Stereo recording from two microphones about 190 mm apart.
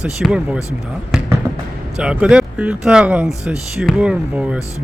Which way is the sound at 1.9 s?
5° right (ahead or behind).